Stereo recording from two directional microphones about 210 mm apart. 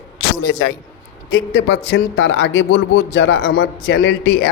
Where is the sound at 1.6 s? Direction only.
75° left (ahead or behind); by 4.5 s 50° left (ahead or behind).